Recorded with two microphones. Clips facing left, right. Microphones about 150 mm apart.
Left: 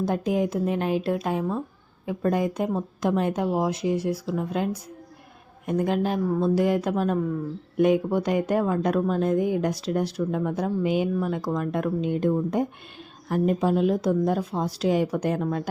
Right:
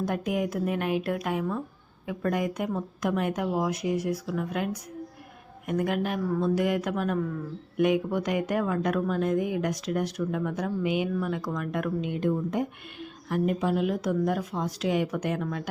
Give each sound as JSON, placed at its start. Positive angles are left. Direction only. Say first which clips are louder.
{"t": 0.0, "sound": "a woman's voice", "louder": "left 4 dB", "side_deg": 30}